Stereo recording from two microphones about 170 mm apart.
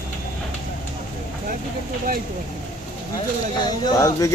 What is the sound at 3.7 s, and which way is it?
Speech, 20° left (ahead or behind).